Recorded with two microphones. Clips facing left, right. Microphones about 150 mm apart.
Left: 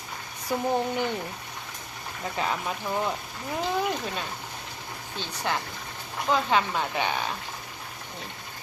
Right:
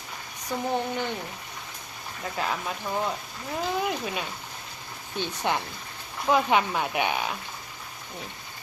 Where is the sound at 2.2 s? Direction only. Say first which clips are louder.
Left 1 dB; centre (ahead or behind).